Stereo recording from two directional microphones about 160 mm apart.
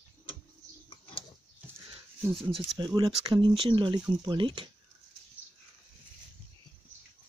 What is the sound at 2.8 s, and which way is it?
Speech, 25° right (ahead or behind).